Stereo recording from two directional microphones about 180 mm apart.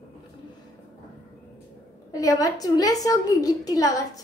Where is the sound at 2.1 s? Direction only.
20° left (ahead or behind).